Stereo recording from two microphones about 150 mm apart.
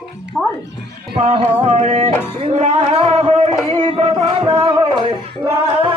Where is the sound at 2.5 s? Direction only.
45° right (ahead or behind).